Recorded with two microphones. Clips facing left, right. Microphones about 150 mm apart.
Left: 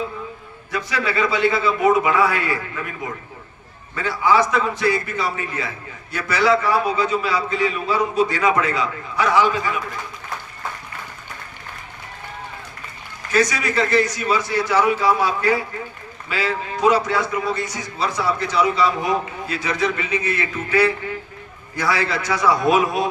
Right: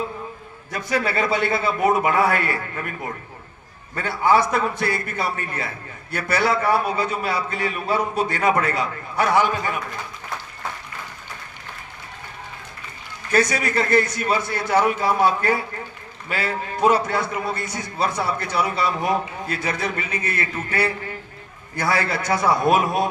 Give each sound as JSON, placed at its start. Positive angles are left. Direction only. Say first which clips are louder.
{"t": 0.7, "sound": "a man's voice", "louder": "even", "side_deg": -50}
{"t": 3.9, "sound": "a man's voice", "louder": "left 1 dB", "side_deg": -55}
{"t": 13.3, "sound": "a man's voice", "louder": "left 1 dB", "side_deg": -50}